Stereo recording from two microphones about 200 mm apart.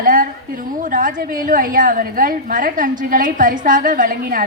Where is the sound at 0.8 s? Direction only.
40° right (ahead or behind).